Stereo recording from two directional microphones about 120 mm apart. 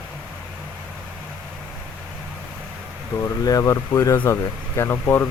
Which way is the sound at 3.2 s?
30° left (ahead or behind).